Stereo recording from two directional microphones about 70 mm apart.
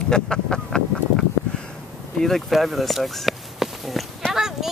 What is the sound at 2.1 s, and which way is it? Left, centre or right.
Speech, centre.